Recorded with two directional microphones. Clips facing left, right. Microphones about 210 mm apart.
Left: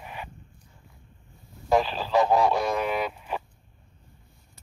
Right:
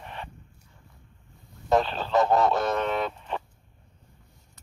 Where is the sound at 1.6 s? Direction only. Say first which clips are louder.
Even; centre (ahead or behind).